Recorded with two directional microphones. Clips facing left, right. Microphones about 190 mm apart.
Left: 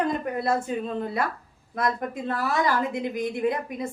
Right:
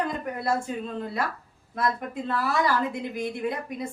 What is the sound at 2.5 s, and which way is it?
Speech, 20° left (ahead or behind).